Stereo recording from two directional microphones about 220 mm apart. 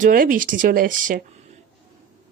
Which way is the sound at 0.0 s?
40° right (ahead or behind).